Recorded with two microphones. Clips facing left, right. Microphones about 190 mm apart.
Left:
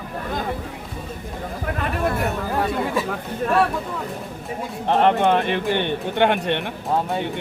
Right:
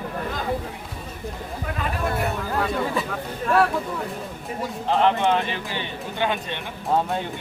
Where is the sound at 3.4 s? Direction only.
50° left (ahead or behind).